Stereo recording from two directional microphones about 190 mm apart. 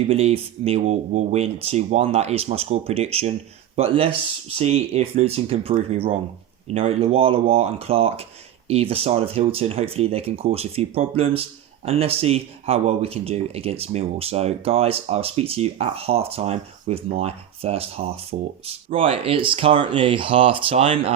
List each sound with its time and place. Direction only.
0.1 s speech: 30° right (ahead or behind)